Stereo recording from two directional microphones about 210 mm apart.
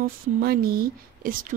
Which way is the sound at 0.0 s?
45° right (ahead or behind).